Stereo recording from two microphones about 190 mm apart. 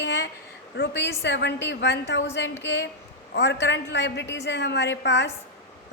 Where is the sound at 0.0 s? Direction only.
65° left (ahead or behind).